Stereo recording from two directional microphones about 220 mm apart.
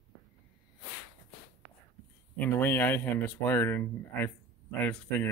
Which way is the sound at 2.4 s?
10° left (ahead or behind).